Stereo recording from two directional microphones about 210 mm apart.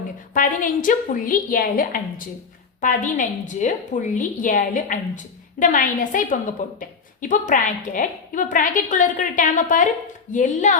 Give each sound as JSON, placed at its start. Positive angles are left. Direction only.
{"t": 0.3, "sound": "a woman's voice", "side_deg": 40}